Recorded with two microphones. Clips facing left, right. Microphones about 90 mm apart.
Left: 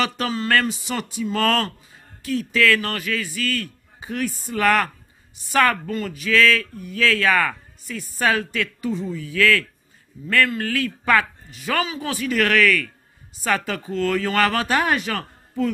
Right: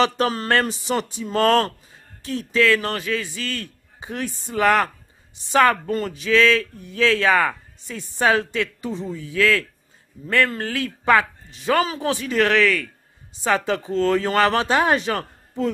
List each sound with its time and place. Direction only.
0.5 s speech: 30° right (ahead or behind)
5.9 s speech: 40° right (ahead or behind)
6.2 s speech: 25° right (ahead or behind)
11.8 s speech: 40° right (ahead or behind)
12.1 s speech: 25° right (ahead or behind)